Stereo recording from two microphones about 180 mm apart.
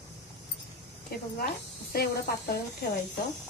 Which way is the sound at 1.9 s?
60° left (ahead or behind).